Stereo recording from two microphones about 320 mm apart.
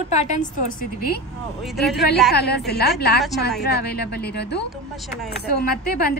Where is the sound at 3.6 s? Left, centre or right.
Left.